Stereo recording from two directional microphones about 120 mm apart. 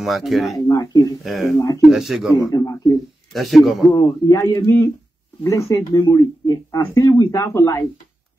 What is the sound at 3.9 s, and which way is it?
Speech, 25° left (ahead or behind).